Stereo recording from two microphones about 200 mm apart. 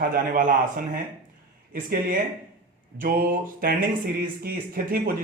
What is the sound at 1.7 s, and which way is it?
Speech, 45° right (ahead or behind).